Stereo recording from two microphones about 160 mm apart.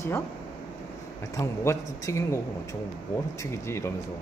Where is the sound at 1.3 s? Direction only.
15° left (ahead or behind).